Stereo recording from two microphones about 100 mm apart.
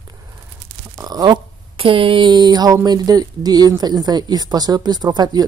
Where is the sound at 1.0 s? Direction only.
45° right (ahead or behind).